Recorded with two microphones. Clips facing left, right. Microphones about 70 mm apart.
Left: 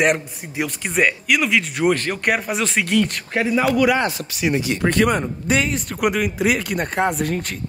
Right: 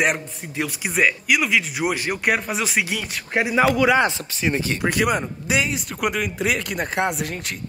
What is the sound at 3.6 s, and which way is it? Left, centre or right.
Speech, right.